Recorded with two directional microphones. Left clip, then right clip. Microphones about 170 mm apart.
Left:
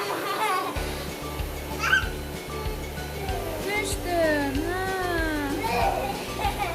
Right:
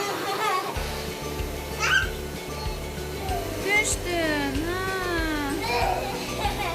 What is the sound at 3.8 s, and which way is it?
Music, 10° left (ahead or behind).